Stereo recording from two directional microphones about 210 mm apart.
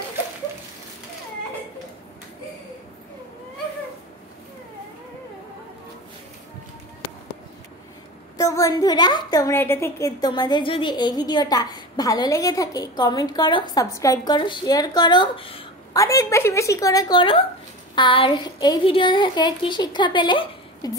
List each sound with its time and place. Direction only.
8.4 s a woman's voice: 15° left (ahead or behind)